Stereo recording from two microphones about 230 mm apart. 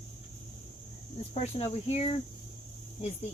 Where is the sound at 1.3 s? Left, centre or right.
Left.